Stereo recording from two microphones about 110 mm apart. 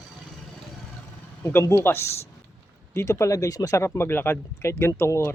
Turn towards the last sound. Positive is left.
turn(degrees=25)  # may be behind; listen again after turning